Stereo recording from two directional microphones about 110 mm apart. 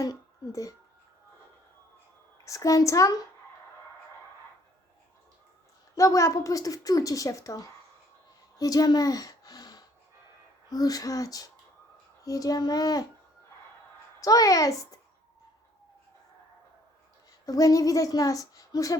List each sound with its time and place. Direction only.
0.0 s speech: 30° left (ahead or behind)
2.4 s a child's voice: 30° left (ahead or behind)
6.0 s a woman's voice: 30° left (ahead or behind)
8.5 s a sound: 35° left (ahead or behind)
10.7 s a woman's voice: 35° left (ahead or behind)
14.2 s a woman's voice: 35° left (ahead or behind)
17.4 s a woman's voice: 30° left (ahead or behind)